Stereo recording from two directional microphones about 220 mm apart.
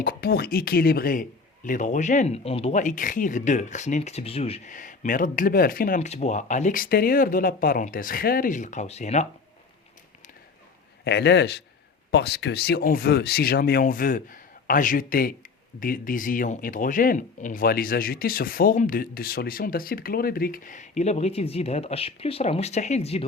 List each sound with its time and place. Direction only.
0.0 s a man's voice: 45° left (ahead or behind)
11.0 s a man's voice: 50° left (ahead or behind); by 23.2 s 30° left (ahead or behind)